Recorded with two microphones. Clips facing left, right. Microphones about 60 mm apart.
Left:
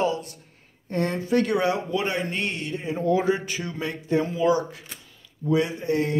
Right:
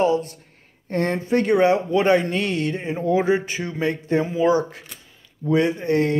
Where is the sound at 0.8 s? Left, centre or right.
Right.